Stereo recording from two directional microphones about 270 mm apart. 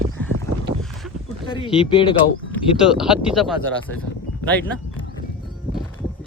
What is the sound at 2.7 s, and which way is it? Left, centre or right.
Speech, centre.